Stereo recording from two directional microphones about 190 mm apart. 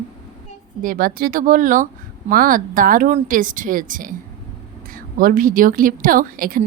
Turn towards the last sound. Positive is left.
turn(degrees=-50)  # may be behind; listen again after turning